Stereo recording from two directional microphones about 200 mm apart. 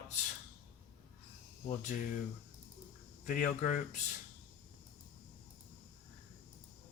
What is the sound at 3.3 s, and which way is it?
Speech, 40° left (ahead or behind).